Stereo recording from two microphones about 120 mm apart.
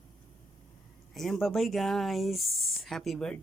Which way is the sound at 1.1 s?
Centre (ahead or behind).